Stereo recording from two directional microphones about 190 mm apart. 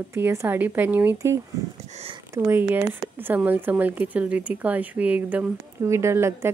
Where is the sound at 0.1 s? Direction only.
15° right (ahead or behind).